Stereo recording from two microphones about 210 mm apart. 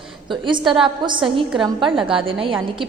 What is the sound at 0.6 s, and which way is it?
Speech, centre (ahead or behind).